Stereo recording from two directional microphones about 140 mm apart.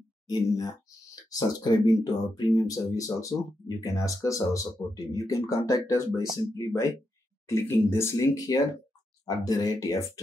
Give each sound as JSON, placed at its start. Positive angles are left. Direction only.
{"t": 0.3, "sound": "speech", "side_deg": 25}